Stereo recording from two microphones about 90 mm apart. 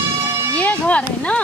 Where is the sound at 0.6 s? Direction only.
15° left (ahead or behind).